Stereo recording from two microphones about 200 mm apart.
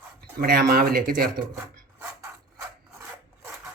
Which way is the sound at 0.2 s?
50° right (ahead or behind).